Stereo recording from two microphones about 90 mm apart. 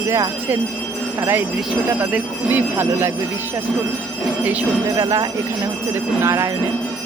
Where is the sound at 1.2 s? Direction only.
25° right (ahead or behind).